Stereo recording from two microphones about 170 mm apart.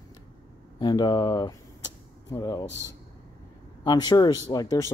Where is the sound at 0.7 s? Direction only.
25° left (ahead or behind).